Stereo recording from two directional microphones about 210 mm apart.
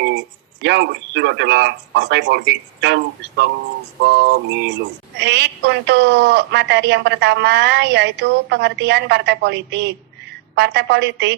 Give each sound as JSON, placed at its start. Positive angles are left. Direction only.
{"t": 0.0, "sound": "a woman's voice", "side_deg": -55}
{"t": 4.0, "sound": "a sound", "side_deg": -50}
{"t": 5.1, "sound": "a woman's voice", "side_deg": -55}